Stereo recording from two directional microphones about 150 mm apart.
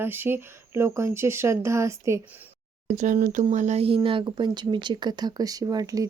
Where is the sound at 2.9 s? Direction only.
55° right (ahead or behind).